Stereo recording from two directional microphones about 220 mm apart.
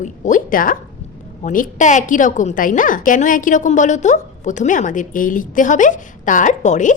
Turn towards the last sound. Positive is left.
turn(degrees=35)  # may be behind; listen again after turning